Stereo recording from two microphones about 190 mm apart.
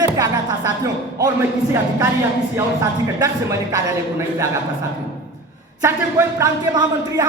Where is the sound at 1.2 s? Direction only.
15° right (ahead or behind).